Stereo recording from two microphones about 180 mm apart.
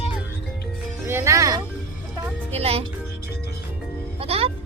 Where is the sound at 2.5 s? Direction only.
35° right (ahead or behind).